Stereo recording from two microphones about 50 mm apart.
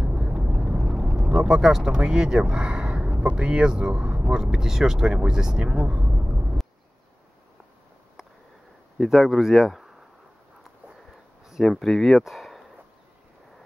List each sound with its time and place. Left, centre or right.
0.0 s vehicle: centre
0.7 s vehicle: centre
1.3 s speech: centre
3.4 s speech: centre
6.0 s vehicle: right
9.1 s speech: centre
11.6 s speech: centre